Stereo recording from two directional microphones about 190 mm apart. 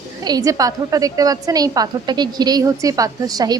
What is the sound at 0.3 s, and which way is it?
A woman's voice, 20° right (ahead or behind).